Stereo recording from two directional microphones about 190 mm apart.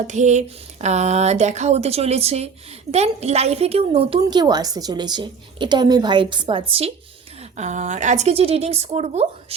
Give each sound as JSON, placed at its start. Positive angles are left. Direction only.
{"t": 0.1, "sound": "a woman's voice", "side_deg": -40}